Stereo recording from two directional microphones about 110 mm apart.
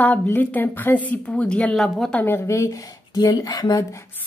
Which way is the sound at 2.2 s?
25° left (ahead or behind).